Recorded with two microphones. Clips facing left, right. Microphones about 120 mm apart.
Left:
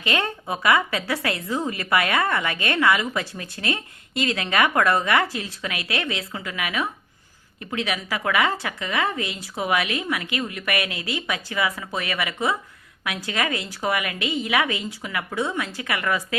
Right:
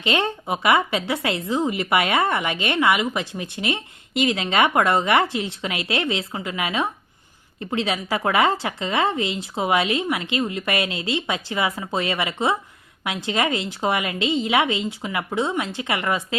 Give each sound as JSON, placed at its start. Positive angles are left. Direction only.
{"t": 0.0, "sound": "a woman's voice", "side_deg": -25}